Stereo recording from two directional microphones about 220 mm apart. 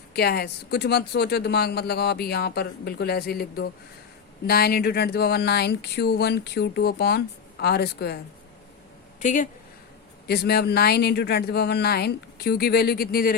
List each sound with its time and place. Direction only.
0.1 s speech: 45° left (ahead or behind)
9.2 s speech: 35° left (ahead or behind)
10.2 s speech: 45° left (ahead or behind)